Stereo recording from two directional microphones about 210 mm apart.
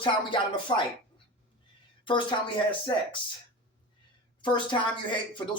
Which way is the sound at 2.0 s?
20° left (ahead or behind).